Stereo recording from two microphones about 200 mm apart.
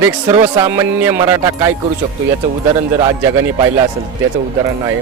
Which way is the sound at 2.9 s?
15° right (ahead or behind).